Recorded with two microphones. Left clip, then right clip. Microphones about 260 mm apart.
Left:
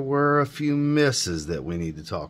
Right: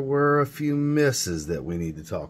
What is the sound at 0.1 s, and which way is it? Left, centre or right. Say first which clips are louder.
Speech: even; centre.